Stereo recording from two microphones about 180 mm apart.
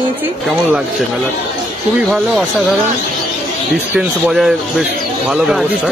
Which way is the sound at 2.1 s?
Centre (ahead or behind).